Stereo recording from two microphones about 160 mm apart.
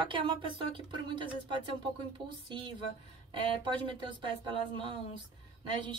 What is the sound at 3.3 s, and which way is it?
Speech, 30° right (ahead or behind).